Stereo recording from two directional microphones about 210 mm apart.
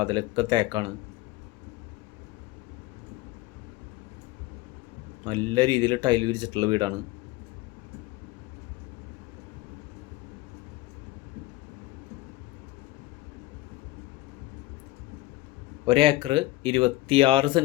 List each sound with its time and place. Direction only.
0.0 s speech: 20° right (ahead or behind)
5.2 s speech: 20° right (ahead or behind)
15.9 s speech: 25° right (ahead or behind)